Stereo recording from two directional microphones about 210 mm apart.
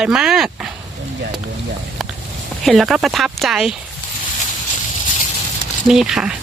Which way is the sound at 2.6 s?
Centre (ahead or behind).